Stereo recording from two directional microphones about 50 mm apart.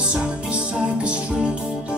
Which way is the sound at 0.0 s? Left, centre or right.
Right.